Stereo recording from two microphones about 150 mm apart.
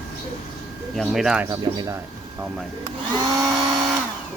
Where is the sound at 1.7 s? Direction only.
35° right (ahead or behind).